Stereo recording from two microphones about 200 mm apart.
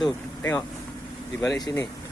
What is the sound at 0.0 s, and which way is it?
Speech, 10° left (ahead or behind).